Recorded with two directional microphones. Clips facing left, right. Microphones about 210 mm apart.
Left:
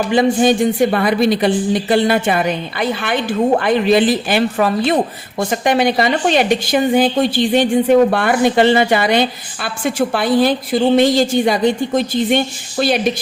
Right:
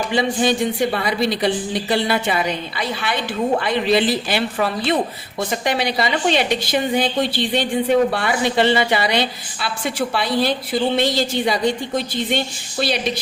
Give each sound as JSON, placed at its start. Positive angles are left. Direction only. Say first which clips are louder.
{"t": 0.1, "sound": "speech", "louder": "left 6 dB", "side_deg": 50}